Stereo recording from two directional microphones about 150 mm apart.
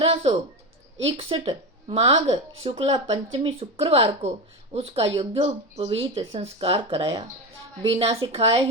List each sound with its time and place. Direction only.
0.0 s bird: 40° right (ahead or behind)
1.0 s speech: 40° right (ahead or behind)